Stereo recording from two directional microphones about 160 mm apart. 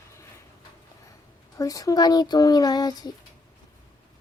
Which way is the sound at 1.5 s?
20° left (ahead or behind).